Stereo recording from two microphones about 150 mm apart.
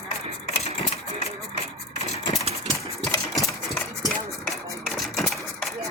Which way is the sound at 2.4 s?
40° right (ahead or behind).